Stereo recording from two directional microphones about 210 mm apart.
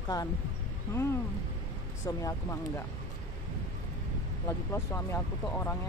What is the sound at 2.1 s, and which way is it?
Speech, 15° left (ahead or behind).